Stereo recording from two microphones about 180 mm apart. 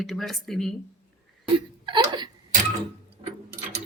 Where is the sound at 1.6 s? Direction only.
25° right (ahead or behind).